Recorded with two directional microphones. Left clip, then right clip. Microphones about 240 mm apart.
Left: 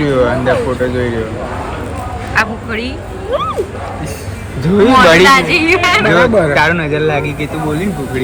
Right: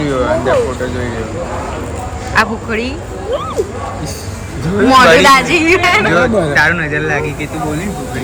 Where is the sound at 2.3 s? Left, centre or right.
Centre.